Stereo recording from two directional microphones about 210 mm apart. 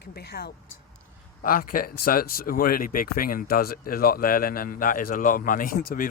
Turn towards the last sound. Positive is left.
turn(degrees=40)  # may be behind; listen again after turning